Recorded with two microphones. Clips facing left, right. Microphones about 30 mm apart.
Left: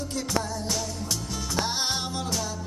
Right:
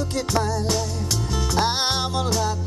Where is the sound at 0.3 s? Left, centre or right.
Right.